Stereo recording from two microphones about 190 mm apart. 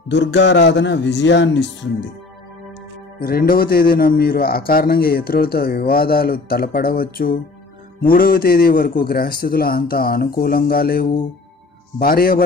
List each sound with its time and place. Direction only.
0.1 s speech: 70° left (ahead or behind)
3.2 s a man's voice: 50° left (ahead or behind)